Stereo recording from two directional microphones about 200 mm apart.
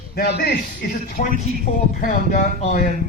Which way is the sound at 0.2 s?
55° left (ahead or behind).